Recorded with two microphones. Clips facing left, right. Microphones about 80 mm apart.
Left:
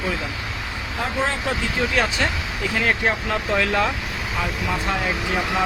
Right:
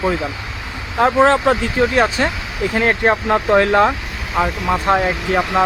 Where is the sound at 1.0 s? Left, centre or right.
Right.